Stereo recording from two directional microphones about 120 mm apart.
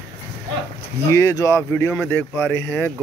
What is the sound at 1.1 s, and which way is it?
Speech, 25° left (ahead or behind).